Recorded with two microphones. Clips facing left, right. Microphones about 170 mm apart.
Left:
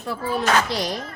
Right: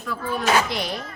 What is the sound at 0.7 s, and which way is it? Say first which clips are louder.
Speech: left 2 dB; 40° left (ahead or behind).